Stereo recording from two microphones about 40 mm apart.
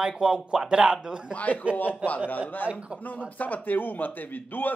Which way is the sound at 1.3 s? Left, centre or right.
Left.